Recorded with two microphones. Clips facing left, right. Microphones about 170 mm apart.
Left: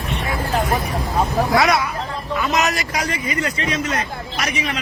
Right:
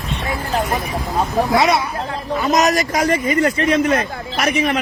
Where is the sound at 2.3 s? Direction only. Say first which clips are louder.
Right 5 dB; 40° right (ahead or behind); by 4.8 s 55° right (ahead or behind).